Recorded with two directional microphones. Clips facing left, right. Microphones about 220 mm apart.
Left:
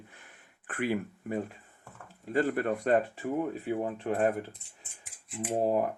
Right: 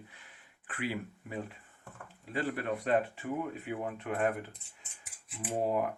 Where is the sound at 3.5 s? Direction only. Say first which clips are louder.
Left 5 dB; 35° left (ahead or behind).